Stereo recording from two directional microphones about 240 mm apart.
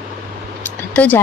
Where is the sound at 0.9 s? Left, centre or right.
Centre.